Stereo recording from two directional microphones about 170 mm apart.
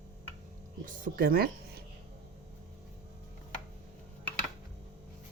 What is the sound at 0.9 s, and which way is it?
Speech, 55° right (ahead or behind).